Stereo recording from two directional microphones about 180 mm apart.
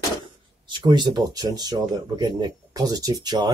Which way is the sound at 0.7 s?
25° right (ahead or behind).